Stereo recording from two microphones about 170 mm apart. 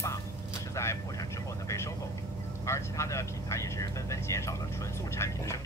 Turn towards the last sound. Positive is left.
turn(degrees=15)  # may be behind; listen again after turning